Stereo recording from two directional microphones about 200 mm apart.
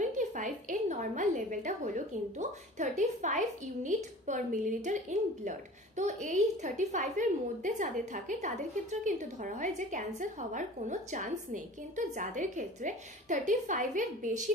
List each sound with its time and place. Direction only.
0.1 s a woman's voice: 40° right (ahead or behind)